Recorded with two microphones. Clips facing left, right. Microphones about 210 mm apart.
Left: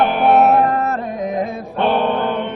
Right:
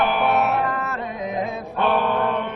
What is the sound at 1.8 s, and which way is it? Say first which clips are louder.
Mantra: left 4 dB; 30° left (ahead or behind).